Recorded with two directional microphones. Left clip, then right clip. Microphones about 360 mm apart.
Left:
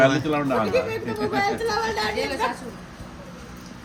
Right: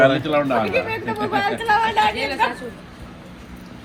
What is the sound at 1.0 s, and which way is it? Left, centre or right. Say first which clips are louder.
Speech: right 3 dB; centre.